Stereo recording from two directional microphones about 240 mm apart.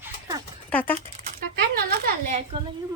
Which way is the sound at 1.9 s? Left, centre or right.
Right.